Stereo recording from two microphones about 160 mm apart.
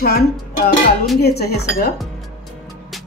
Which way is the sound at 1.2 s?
90° left.